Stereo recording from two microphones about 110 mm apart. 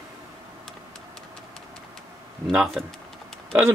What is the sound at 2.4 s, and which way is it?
Speech, 5° right (ahead or behind).